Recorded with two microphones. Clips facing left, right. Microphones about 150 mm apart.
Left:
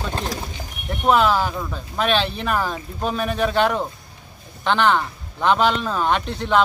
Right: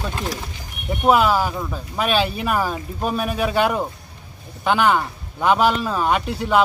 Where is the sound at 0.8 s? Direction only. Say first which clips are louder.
Right 1 dB; 10° right (ahead or behind).